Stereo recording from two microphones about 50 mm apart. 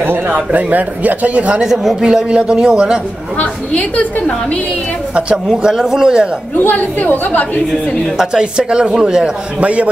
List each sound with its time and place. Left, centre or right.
0.5 s speech: right
1.6 s speech: centre
3.3 s a woman's voice: left
5.6 s speech: centre
6.6 s a woman's voice: left
8.2 s speech: centre
9.6 s a man's voice: right